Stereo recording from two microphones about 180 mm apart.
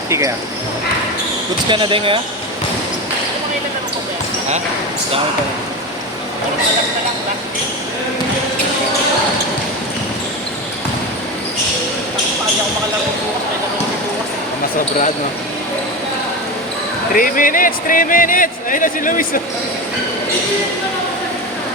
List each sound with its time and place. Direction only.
0.1 s speech: 15° right (ahead or behind)
1.7 s speech: 30° right (ahead or behind)
17.2 s speech: 50° left (ahead or behind)